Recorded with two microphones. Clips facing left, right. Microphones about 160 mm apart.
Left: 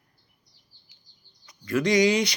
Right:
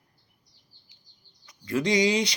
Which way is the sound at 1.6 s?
25° right (ahead or behind).